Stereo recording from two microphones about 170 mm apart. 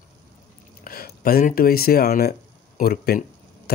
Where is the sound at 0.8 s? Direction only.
60° left (ahead or behind).